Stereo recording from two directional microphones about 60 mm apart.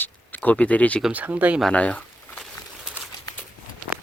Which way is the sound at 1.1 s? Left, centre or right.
Right.